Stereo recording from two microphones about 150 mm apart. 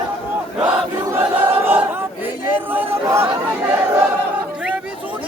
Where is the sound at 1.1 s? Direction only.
15° right (ahead or behind).